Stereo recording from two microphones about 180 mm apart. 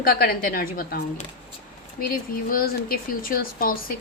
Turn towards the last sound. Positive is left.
turn(degrees=55)  # may be behind; listen again after turning